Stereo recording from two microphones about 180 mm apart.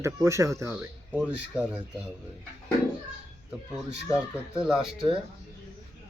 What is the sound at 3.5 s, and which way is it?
Speech, 5° right (ahead or behind).